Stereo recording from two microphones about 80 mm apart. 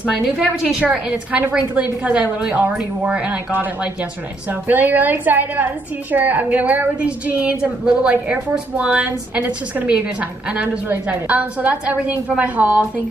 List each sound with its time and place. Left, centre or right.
1.3 s a woman's voice: centre